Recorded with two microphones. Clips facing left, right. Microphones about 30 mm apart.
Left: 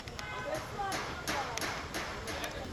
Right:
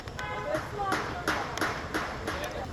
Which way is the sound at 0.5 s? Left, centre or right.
Right.